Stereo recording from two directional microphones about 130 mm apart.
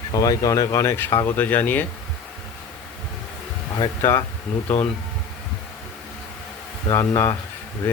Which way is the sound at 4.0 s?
20° left (ahead or behind).